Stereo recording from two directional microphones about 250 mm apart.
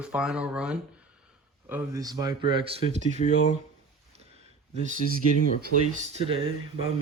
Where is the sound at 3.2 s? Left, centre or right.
Left.